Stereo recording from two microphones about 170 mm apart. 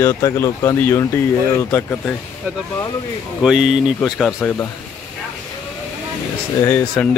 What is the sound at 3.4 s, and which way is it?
Speech, 5° right (ahead or behind).